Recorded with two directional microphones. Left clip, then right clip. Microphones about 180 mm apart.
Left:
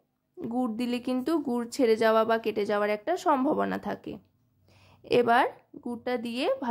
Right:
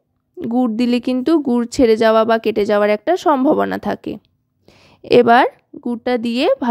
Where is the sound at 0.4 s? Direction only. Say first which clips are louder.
Right 13 dB; 35° right (ahead or behind).